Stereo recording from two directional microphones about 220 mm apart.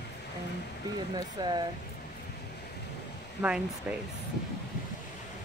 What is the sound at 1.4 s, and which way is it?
Speech, 20° right (ahead or behind).